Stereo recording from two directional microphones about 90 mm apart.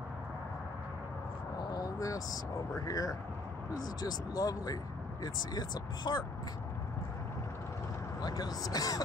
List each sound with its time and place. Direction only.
1.6 s vehicle: 45° left (ahead or behind)
2.8 s speech: 40° left (ahead or behind)
8.2 s speech: 45° left (ahead or behind)